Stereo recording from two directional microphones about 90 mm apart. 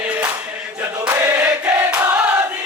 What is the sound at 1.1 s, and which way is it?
Choir, 25° right (ahead or behind).